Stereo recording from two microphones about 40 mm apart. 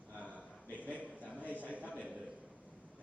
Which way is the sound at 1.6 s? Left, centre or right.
Right.